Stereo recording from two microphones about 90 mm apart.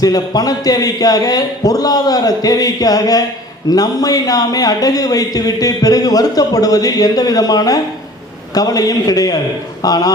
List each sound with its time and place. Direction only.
0.0 s speech: 45° left (ahead or behind)